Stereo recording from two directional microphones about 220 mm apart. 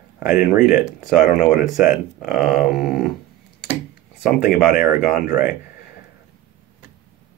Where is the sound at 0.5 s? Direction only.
5° right (ahead or behind).